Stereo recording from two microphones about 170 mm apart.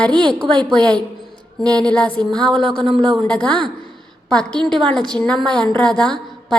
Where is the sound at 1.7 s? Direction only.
5° left (ahead or behind).